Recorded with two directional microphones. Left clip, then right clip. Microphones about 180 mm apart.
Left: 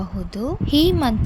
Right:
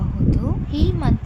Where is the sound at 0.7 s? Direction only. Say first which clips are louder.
Left 8 dB; 35° left (ahead or behind).